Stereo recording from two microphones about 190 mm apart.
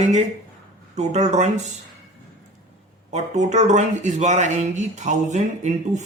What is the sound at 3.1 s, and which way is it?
Speech, 40° right (ahead or behind).